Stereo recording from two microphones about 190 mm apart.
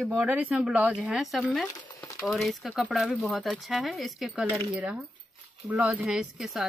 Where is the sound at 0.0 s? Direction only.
10° right (ahead or behind).